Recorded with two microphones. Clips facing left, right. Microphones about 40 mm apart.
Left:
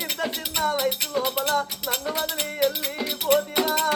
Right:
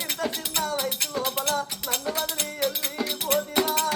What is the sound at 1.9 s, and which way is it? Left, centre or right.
Music, centre.